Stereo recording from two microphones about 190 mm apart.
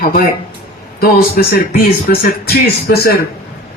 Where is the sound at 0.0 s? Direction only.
50° left (ahead or behind).